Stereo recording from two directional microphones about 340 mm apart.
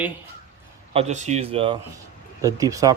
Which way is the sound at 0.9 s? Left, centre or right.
Centre.